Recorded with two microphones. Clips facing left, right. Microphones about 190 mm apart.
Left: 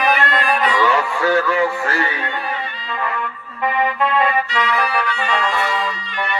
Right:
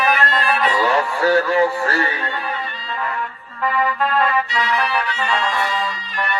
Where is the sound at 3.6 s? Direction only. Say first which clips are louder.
Left 1 dB; 20° left (ahead or behind).